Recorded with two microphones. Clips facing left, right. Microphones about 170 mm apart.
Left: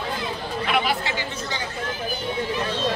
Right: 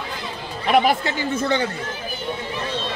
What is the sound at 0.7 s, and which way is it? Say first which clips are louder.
Speech: right 8 dB; 50° right (ahead or behind).